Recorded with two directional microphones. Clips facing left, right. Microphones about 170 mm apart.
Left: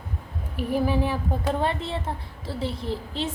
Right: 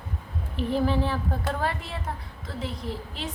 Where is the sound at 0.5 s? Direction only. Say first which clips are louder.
Left 1 dB; 10° left (ahead or behind).